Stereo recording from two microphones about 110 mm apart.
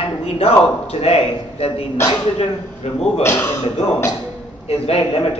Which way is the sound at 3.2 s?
25° left (ahead or behind).